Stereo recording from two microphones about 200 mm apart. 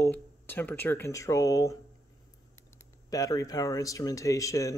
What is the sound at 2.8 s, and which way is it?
Speech, 15° left (ahead or behind).